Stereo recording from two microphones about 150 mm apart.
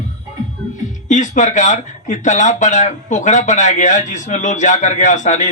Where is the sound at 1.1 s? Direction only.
55° left (ahead or behind).